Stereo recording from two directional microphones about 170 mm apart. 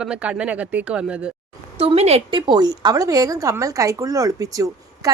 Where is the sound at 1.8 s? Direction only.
35° right (ahead or behind).